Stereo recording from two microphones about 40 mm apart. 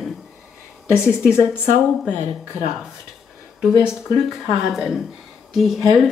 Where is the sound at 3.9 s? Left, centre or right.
Centre.